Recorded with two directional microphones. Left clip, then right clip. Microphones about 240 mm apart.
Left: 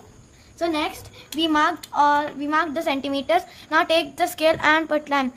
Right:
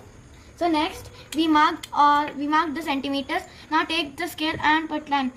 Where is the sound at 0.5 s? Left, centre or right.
Left.